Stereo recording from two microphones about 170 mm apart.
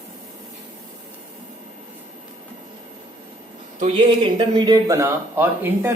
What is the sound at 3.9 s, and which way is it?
Speech, 30° right (ahead or behind).